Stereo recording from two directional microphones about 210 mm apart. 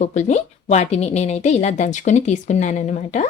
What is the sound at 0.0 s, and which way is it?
A woman's voice, 35° left (ahead or behind).